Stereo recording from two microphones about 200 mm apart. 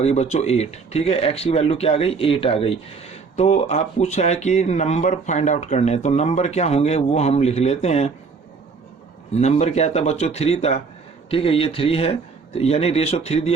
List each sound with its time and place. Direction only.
0.0 s speech: 30° left (ahead or behind)
9.3 s speech: 35° left (ahead or behind)